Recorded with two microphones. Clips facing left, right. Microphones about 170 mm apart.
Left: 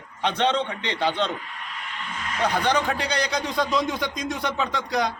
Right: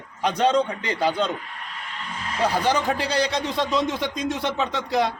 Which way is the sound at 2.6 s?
5° right (ahead or behind).